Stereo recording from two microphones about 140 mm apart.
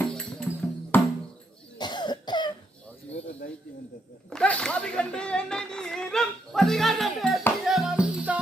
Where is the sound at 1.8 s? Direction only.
30° left (ahead or behind).